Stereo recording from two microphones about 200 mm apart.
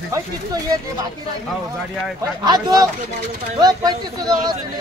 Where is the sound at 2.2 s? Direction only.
20° right (ahead or behind).